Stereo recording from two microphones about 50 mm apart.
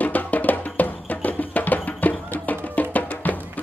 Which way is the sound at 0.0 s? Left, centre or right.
Left.